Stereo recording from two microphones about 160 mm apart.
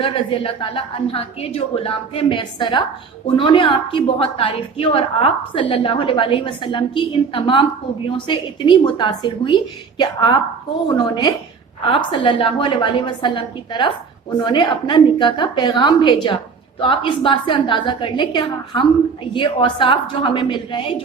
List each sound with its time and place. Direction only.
0.0 s a woman's voice: 35° left (ahead or behind)